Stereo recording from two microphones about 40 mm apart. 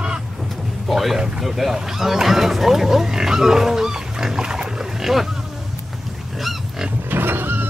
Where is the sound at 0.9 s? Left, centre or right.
Centre.